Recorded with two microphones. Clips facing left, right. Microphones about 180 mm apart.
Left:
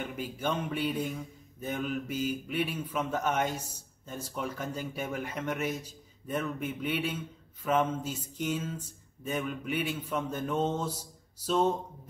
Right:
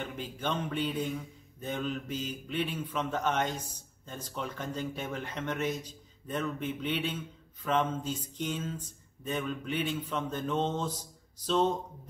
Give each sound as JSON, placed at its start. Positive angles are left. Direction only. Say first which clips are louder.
{"t": 0.0, "sound": "a man's voice", "louder": "left 2 dB", "side_deg": 10}